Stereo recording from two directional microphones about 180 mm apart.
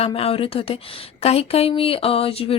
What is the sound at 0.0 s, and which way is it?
Speech, 35° left (ahead or behind).